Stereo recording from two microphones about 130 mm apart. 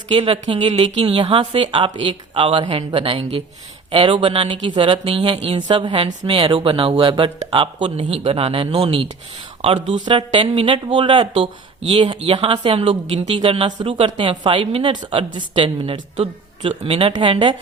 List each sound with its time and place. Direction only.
0.1 s a woman's voice: 40° right (ahead or behind); by 10.0 s 55° right (ahead or behind)
10.1 s a woman's voice: 40° right (ahead or behind)